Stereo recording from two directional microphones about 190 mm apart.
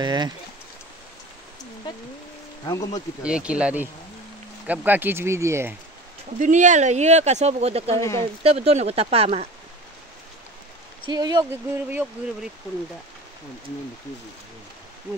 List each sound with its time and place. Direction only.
0.0 s speech: 25° right (ahead or behind)
2.6 s speech: 20° left (ahead or behind)
3.2 s speech: 5° right (ahead or behind)
6.4 s speech: 40° right (ahead or behind)
11.1 s speech: 20° right (ahead or behind)
11.9 s speech: 10° right (ahead or behind)